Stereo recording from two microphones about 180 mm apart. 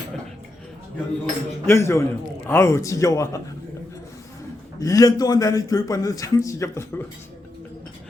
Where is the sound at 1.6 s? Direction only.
15° left (ahead or behind).